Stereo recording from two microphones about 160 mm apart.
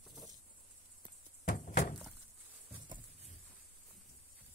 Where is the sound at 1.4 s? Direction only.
55° left (ahead or behind).